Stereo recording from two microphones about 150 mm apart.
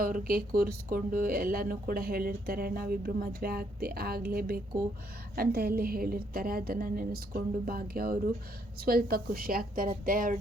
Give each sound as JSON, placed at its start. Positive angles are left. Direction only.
{"t": 0.0, "sound": "a woman's voice", "side_deg": -75}